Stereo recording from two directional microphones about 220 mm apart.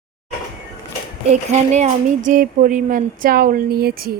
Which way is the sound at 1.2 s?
30° right (ahead or behind).